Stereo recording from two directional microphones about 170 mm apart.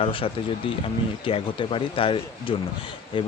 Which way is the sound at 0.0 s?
30° left (ahead or behind).